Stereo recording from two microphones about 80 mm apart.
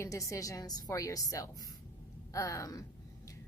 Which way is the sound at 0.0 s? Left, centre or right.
Left.